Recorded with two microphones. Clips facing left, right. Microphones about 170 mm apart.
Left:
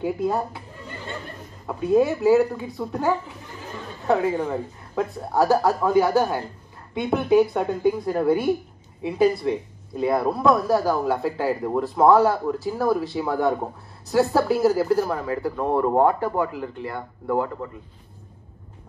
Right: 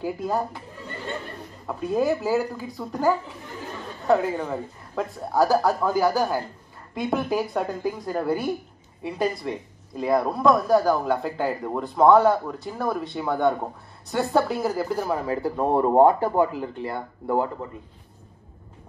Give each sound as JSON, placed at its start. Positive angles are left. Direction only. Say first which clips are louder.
{"t": 0.0, "sound": "speech", "louder": "left 2 dB", "side_deg": 0}
{"t": 1.8, "sound": "speech", "louder": "left 4 dB", "side_deg": 0}
{"t": 15.2, "sound": "speech", "louder": "right 1 dB", "side_deg": -25}